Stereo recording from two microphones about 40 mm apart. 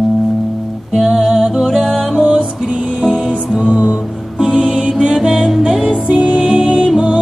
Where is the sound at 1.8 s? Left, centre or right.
Centre.